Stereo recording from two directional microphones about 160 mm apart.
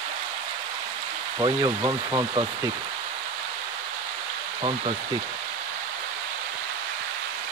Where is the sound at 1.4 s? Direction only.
25° right (ahead or behind).